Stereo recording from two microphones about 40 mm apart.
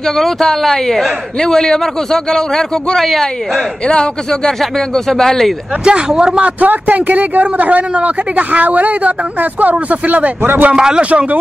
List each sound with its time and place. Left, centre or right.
0.0 s speech: centre
3.0 s a woman's voice: centre
3.8 s speech: left
5.9 s speech: right
6.4 s speech: right
10.4 s a man's voice: right
10.7 s a man's voice: centre
11.0 s speech: right